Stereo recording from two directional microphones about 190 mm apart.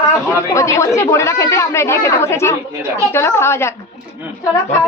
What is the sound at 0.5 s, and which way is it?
A woman's voice, 15° left (ahead or behind).